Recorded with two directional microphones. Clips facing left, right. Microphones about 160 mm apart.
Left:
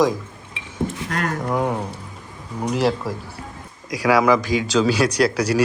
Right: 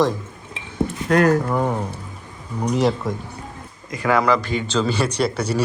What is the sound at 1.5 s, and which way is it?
Speech, 5° left (ahead or behind).